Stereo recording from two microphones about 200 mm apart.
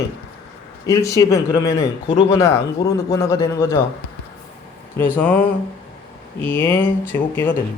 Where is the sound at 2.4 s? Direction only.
15° left (ahead or behind).